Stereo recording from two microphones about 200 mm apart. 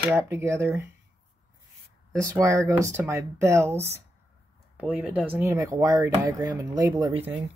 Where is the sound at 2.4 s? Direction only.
15° right (ahead or behind).